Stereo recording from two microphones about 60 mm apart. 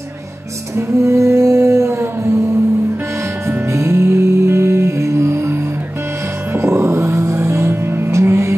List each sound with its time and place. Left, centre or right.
0.7 s a sound: right
3.4 s music: right
7.9 s music: right